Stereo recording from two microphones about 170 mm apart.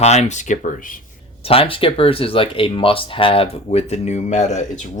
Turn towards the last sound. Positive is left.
turn(degrees=45)  # may be behind; listen again after turning